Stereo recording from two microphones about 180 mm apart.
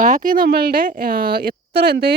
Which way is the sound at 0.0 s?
45° right (ahead or behind).